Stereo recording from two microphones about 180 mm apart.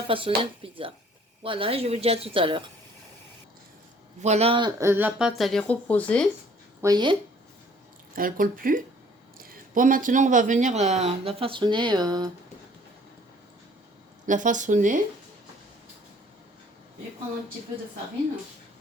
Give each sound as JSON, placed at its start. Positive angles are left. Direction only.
{"t": 0.1, "sound": "speech", "side_deg": -30}
{"t": 4.2, "sound": "speech", "side_deg": -35}
{"t": 4.8, "sound": "speech", "side_deg": -10}
{"t": 5.4, "sound": "speech", "side_deg": 0}
{"t": 6.8, "sound": "speech", "side_deg": -25}
{"t": 8.1, "sound": "speech", "side_deg": -50}
{"t": 14.3, "sound": "speech", "side_deg": -45}